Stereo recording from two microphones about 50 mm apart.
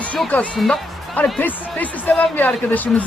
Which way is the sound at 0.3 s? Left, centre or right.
Left.